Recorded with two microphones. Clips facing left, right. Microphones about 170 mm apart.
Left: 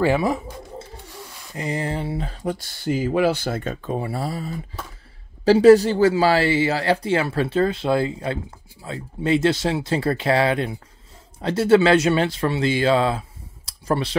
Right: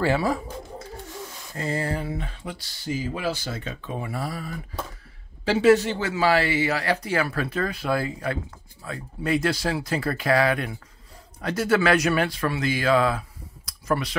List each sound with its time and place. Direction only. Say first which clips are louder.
0.0 s speech: left 3 dB; 20° left (ahead or behind)
5.4 s speech: left 6 dB; 35° left (ahead or behind)
13.7 s clicking: left 3 dB; 30° left (ahead or behind)